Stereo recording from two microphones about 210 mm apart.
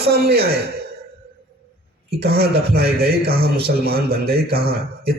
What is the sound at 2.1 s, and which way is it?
A man's voice, 50° right (ahead or behind).